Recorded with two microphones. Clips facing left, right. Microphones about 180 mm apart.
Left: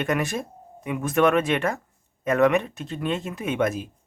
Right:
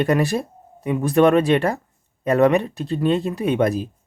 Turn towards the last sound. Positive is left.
turn(degrees=-35)  # may be behind; listen again after turning